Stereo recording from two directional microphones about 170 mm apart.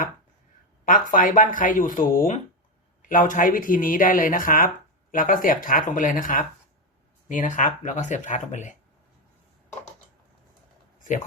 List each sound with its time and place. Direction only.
0.9 s speech: 50° left (ahead or behind)